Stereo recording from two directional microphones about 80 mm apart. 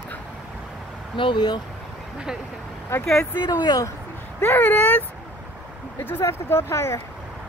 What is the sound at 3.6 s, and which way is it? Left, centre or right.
Speech, left.